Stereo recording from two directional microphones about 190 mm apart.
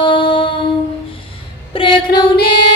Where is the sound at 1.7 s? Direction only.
25° left (ahead or behind).